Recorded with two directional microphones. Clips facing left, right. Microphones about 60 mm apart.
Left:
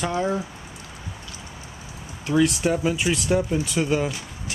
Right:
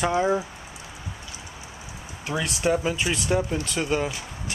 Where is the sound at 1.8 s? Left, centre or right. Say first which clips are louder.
Left 3 dB; centre.